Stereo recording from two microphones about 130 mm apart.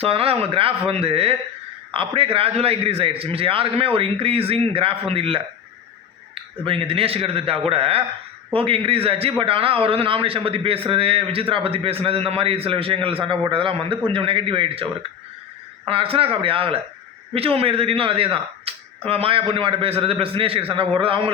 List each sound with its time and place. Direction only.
0.0 s speech: 50° right (ahead or behind)
6.7 s speech: 45° right (ahead or behind)
15.9 s speech: 45° right (ahead or behind)